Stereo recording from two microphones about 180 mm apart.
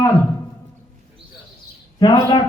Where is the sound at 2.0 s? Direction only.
25° left (ahead or behind).